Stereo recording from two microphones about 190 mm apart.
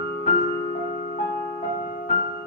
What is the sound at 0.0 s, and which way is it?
Music, 50° left (ahead or behind).